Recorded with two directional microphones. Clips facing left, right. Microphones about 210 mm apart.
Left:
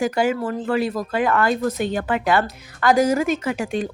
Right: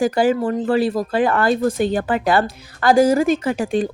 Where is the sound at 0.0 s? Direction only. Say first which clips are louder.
Right 4 dB; 35° right (ahead or behind).